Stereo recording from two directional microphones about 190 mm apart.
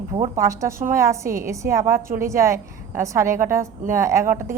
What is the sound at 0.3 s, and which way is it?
A woman's voice, 15° right (ahead or behind).